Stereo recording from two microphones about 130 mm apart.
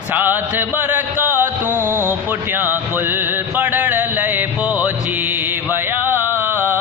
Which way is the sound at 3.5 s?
15° right (ahead or behind).